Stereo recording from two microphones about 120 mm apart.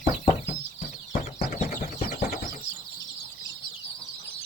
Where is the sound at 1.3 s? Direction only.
85° left.